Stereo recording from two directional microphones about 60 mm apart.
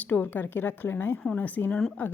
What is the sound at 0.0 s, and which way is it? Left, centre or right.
A woman's voice, left.